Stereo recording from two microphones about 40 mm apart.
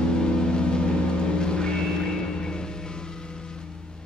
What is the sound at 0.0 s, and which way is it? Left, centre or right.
Vehicle, left.